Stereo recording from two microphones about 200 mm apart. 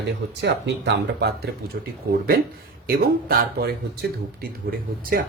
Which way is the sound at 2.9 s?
50° right (ahead or behind).